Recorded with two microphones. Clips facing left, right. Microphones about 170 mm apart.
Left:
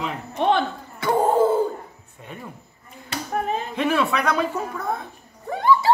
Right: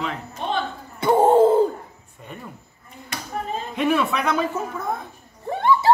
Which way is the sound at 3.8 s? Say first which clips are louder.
Right 1 dB; centre (ahead or behind).